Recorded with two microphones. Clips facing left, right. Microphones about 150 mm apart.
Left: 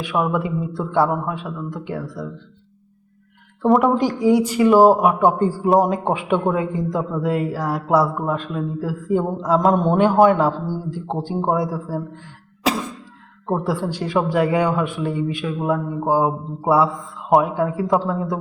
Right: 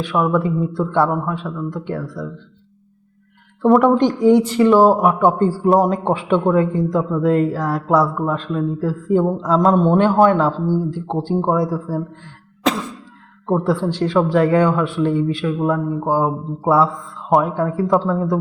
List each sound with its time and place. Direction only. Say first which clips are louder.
0.0 s a man's voice: right 3 dB; 15° left (ahead or behind)
3.7 s a man's voice: right 3 dB; centre (ahead or behind)
13.5 s a man's voice: right 4 dB; 10° left (ahead or behind)